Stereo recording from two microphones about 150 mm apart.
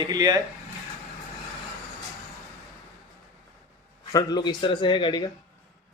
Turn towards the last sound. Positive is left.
turn(degrees=30)  # may be behind; listen again after turning